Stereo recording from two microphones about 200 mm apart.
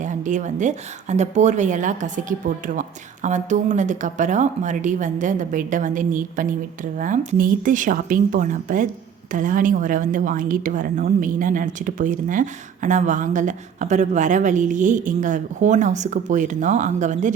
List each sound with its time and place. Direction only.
0.0 s a woman's voice: 40° right (ahead or behind)